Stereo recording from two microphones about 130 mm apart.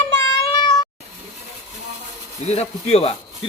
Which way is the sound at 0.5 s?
35° left (ahead or behind).